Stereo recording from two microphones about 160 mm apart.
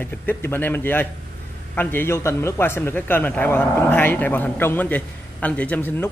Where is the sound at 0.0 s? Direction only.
10° left (ahead or behind).